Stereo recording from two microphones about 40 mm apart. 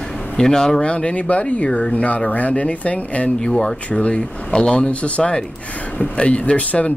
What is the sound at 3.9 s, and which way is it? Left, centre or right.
Speech, left.